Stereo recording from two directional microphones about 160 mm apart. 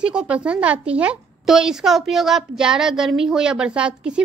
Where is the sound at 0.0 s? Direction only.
5° right (ahead or behind).